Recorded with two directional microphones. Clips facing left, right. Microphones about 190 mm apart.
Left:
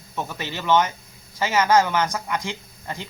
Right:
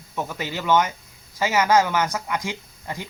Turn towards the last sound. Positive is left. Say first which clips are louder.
# right 1 dB
turn(degrees=-15)  # may be behind; listen again after turning